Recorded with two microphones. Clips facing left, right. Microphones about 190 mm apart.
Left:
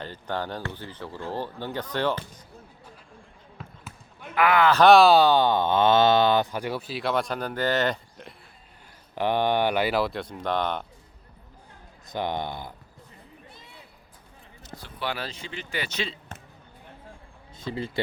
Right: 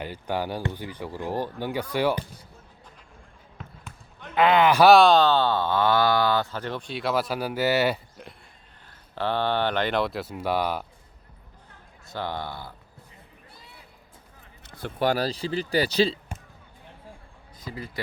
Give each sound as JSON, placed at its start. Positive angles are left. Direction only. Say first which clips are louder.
{"t": 0.0, "sound": "speech", "louder": "right 2 dB", "side_deg": -10}
{"t": 3.6, "sound": "basketball bounce", "louder": "even", "side_deg": 5}
{"t": 4.4, "sound": "speech", "louder": "right 1 dB", "side_deg": -20}
{"t": 4.8, "sound": "speech", "louder": "left 1 dB", "side_deg": 0}
{"t": 9.1, "sound": "speech", "louder": "left 2 dB", "side_deg": 15}
{"t": 12.0, "sound": "speech", "louder": "left 3 dB", "side_deg": 20}
{"t": 14.6, "sound": "speech", "louder": "right 8 dB", "side_deg": -55}
{"t": 17.6, "sound": "speech", "louder": "left 6 dB", "side_deg": 25}